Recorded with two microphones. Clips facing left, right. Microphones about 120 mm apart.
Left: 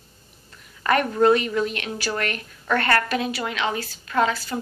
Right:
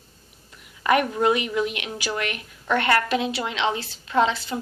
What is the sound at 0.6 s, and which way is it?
A woman's voice, 15° right (ahead or behind).